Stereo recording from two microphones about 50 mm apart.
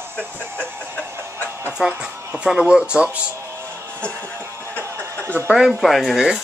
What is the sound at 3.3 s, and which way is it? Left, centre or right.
Music, right.